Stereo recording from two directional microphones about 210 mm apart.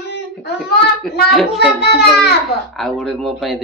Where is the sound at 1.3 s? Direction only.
Centre (ahead or behind).